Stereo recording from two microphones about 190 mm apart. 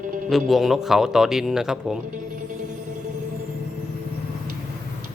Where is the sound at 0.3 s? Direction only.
Centre (ahead or behind).